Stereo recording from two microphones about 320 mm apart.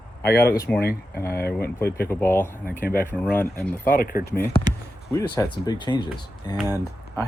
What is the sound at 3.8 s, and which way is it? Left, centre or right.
Speech, left.